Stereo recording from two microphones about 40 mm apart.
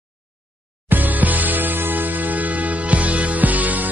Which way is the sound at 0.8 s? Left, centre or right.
Right.